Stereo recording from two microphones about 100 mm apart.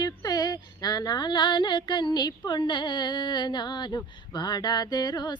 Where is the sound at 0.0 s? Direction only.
45° left (ahead or behind).